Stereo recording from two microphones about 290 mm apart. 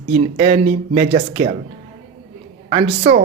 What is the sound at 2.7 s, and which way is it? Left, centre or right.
Speech, centre.